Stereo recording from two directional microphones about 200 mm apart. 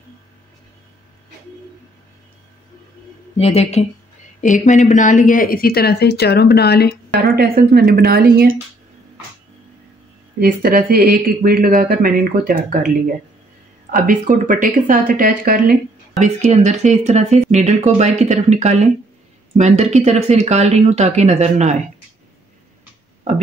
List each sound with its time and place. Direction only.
3.3 s speech: 30° left (ahead or behind); by 7.0 s 55° left (ahead or behind)
7.3 s speech: 50° right (ahead or behind)
10.4 s speech: 50° right (ahead or behind)
16.2 s speech: 35° right (ahead or behind)